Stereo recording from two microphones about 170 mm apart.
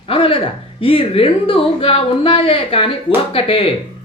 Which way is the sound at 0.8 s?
35° left (ahead or behind).